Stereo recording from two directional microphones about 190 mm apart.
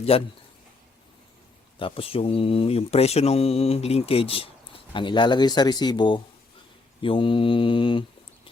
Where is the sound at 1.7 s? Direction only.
30° left (ahead or behind).